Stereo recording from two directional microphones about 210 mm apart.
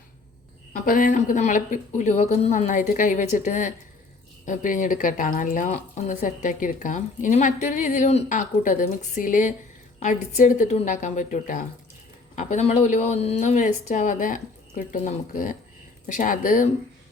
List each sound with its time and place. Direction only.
0.7 s a woman's voice: 40° left (ahead or behind)